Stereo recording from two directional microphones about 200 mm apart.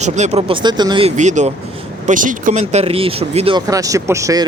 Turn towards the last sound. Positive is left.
turn(degrees=-15)  # may be behind; listen again after turning